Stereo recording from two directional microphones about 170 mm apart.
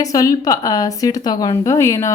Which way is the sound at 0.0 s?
20° left (ahead or behind).